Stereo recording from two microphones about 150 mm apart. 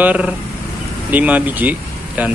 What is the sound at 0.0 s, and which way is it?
Speech, 10° right (ahead or behind).